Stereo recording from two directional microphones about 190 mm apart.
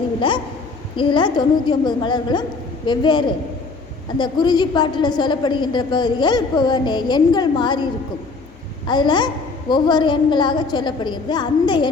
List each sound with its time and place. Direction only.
0.9 s a woman's voice: 25° left (ahead or behind)
8.9 s a woman's voice: 25° left (ahead or behind)